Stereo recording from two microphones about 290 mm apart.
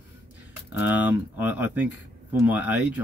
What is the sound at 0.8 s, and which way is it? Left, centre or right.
Speech, centre.